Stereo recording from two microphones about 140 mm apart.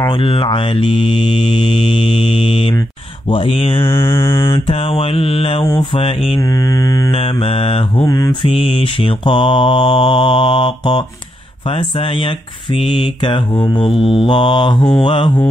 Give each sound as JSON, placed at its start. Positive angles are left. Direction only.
{"t": 0.0, "sound": "mantra", "side_deg": 35}
{"t": 3.8, "sound": "mantra", "side_deg": 20}
{"t": 4.5, "sound": "mantra", "side_deg": 40}
{"t": 8.0, "sound": "mantra", "side_deg": 25}
{"t": 8.5, "sound": "mantra", "side_deg": 40}
{"t": 12.8, "sound": "mantra", "side_deg": 35}